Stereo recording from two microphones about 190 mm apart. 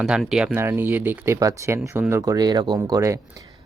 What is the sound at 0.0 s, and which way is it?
Speech, centre (ahead or behind).